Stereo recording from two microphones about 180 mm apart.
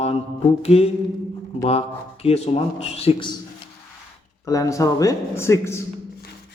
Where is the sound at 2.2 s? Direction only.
35° left (ahead or behind).